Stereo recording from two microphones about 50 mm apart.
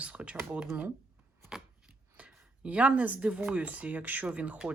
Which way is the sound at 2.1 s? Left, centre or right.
Right.